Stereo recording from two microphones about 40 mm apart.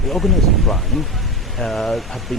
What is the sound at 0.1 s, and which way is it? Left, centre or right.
Speech, centre.